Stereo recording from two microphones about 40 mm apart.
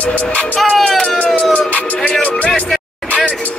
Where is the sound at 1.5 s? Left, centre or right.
Left.